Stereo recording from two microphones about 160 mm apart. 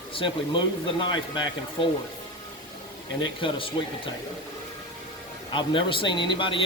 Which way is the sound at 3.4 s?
35° left (ahead or behind).